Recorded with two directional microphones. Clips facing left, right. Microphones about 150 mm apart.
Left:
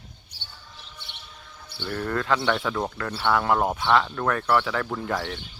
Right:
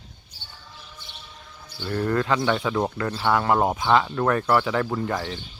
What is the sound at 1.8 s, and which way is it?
Speech, 5° right (ahead or behind).